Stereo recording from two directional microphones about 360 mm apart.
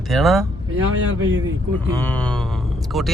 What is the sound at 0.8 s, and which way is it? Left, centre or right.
Speech, right.